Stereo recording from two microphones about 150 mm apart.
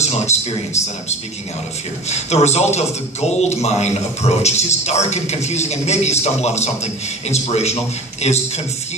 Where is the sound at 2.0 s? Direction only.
50° left (ahead or behind).